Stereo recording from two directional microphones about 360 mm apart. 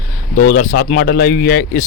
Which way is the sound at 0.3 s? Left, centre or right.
Left.